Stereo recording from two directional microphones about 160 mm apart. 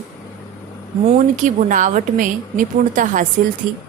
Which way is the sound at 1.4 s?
55° right (ahead or behind).